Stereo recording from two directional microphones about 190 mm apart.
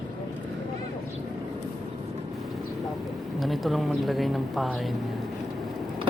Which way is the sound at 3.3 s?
Centre (ahead or behind).